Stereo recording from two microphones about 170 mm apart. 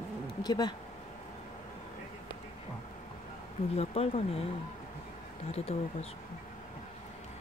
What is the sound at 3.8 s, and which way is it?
Speech, 35° left (ahead or behind).